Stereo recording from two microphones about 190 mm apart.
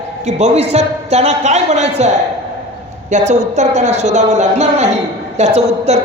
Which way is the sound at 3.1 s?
40° right (ahead or behind).